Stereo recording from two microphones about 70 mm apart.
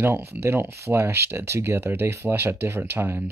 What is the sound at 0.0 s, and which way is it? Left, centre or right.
Speech, right.